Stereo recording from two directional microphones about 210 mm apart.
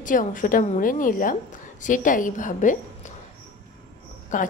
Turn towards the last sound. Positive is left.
turn(degrees=40)  # may be behind; listen again after turning